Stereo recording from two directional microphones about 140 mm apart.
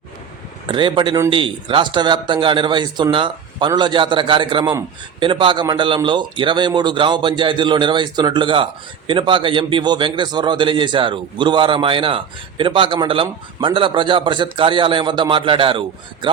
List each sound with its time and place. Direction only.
0.7 s a man's voice: 35° right (ahead or behind)